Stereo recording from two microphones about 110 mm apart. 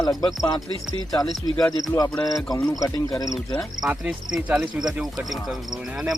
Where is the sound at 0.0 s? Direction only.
35° left (ahead or behind).